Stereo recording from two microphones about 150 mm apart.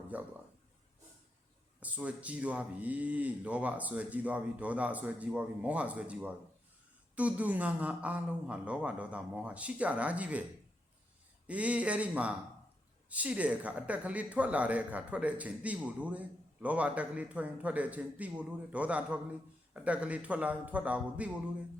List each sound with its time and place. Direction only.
0.1 s speech: 10° right (ahead or behind)
1.8 s speech: 10° right (ahead or behind)
11.4 s speech: 10° right (ahead or behind)